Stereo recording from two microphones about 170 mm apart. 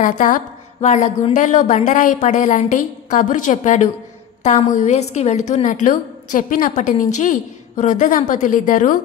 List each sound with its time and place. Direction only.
0.0 s a woman's voice: 50° left (ahead or behind)